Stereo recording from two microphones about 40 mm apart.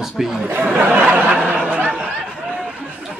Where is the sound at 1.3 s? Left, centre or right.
Right.